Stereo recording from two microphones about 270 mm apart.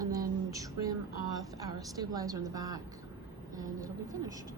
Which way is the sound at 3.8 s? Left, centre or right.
Centre.